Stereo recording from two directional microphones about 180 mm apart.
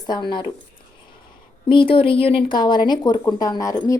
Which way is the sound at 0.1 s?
25° left (ahead or behind).